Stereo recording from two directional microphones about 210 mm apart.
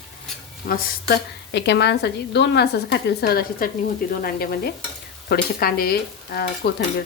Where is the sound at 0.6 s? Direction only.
45° left (ahead or behind).